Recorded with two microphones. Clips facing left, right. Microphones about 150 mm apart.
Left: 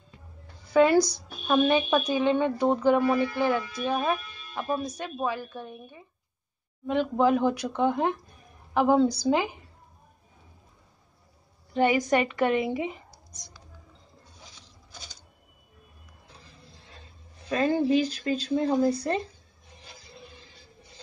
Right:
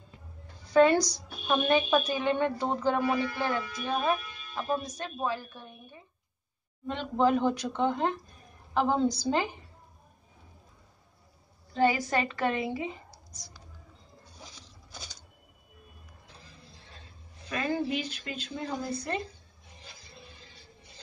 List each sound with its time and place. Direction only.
0.7 s a woman's voice: 10° left (ahead or behind)
11.7 s a woman's voice: 20° left (ahead or behind)
17.5 s speech: 30° left (ahead or behind)